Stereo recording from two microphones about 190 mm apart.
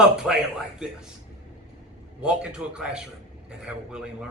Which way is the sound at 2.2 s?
5° right (ahead or behind).